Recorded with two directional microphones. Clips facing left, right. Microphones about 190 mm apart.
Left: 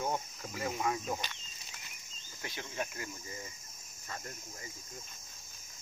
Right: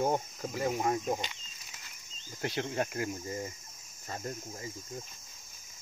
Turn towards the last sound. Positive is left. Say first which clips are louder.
# right 6 dB
turn(degrees=-30)  # may be behind; listen again after turning